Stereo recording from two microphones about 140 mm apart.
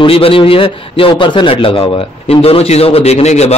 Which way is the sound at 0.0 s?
40° left (ahead or behind).